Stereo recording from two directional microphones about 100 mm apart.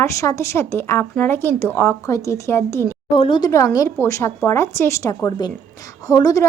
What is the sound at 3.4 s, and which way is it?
Speech, 35° left (ahead or behind).